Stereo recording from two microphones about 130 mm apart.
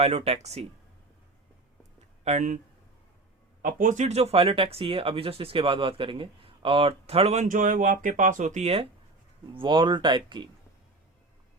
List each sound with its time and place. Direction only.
0.3 s speech: 55° right (ahead or behind)
2.2 s speech: 70° right (ahead or behind)
3.6 s speech: 90° right; by 7.4 s 50° right (ahead or behind)
7.4 s speech: 85° right; by 8.9 s 50° right (ahead or behind)
9.6 s speech: 40° right (ahead or behind)